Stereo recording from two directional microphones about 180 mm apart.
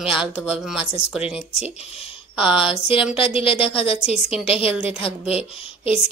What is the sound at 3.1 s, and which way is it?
A woman's voice, 30° left (ahead or behind).